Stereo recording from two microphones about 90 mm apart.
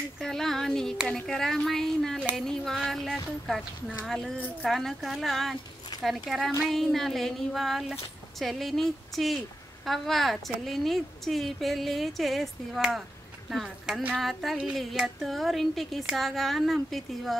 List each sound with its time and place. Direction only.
0.2 s a woman's voice: 5° left (ahead or behind)